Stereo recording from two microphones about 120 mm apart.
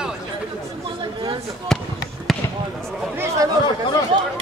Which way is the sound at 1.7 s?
5° left (ahead or behind).